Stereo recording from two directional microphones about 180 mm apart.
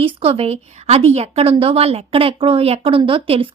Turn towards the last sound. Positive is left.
turn(degrees=-30)  # may be behind; listen again after turning